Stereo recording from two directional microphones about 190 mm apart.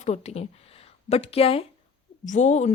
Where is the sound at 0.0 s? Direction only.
35° left (ahead or behind).